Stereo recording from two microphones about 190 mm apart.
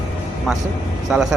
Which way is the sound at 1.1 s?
5° right (ahead or behind).